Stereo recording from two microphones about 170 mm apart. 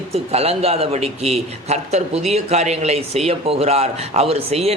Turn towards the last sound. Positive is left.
turn(degrees=-35)  # may be behind; listen again after turning